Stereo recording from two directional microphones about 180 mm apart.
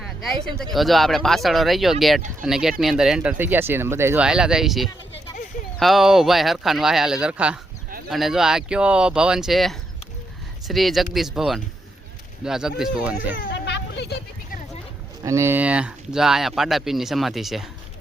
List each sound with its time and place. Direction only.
0.0 s speech: centre (ahead or behind)
13.5 s a sound: 75° left (ahead or behind)
15.2 s speech: 15° right (ahead or behind)